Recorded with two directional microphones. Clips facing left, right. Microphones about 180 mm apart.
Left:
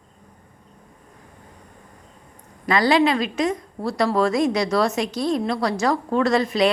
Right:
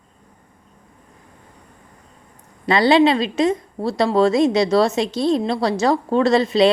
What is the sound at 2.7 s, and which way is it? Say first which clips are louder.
A woman's voice: right 4 dB; 25° right (ahead or behind).